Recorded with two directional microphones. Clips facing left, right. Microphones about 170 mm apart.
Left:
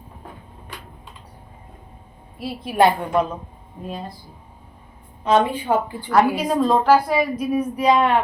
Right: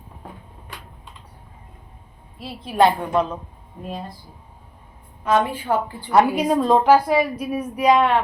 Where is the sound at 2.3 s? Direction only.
10° left (ahead or behind).